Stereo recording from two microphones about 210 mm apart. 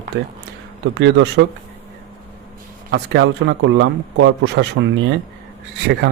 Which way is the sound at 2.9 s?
55° right (ahead or behind).